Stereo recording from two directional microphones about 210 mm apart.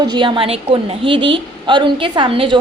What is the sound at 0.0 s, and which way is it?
A woman's voice, 20° right (ahead or behind).